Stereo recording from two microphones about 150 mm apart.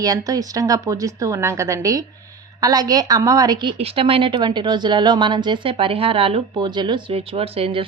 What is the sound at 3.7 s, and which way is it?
A woman's voice, 40° right (ahead or behind).